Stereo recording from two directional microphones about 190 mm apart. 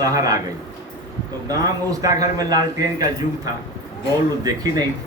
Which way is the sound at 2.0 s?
20° right (ahead or behind).